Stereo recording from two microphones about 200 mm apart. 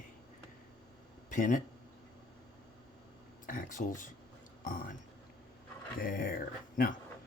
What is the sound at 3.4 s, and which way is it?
Speech, 40° left (ahead or behind).